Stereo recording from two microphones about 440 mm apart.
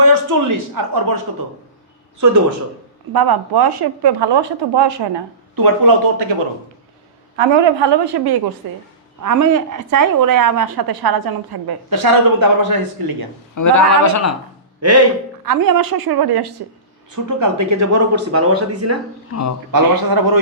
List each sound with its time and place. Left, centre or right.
0.0 s speech: right
3.1 s speech: right
5.6 s speech: right
7.3 s a woman's voice: right
8.6 s speech: right
9.2 s speech: right
13.6 s speech: left
14.8 s speech: right
15.4 s speech: right
17.4 s speech: right
19.3 s speech: left
19.7 s speech: right